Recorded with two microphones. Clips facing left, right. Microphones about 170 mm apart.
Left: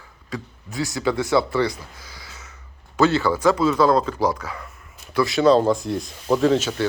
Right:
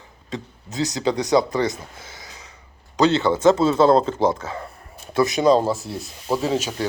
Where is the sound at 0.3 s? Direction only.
20° right (ahead or behind).